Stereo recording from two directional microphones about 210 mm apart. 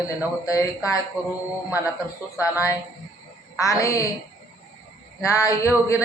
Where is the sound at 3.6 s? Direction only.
15° left (ahead or behind).